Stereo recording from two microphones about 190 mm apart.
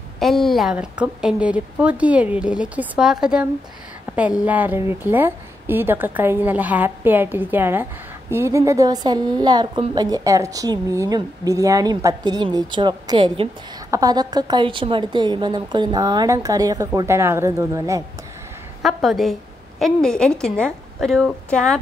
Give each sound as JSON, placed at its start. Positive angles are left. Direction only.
{"t": 0.2, "sound": "a woman's voice", "side_deg": 0}
{"t": 18.8, "sound": "a woman's voice", "side_deg": 0}